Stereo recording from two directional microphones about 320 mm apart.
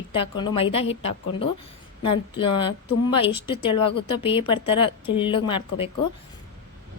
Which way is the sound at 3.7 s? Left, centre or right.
Left.